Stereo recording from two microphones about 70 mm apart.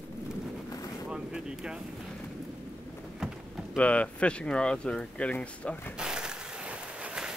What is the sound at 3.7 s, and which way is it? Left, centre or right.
Speech, centre.